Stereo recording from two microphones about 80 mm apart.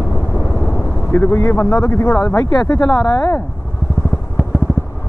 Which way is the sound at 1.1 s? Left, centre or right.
Left.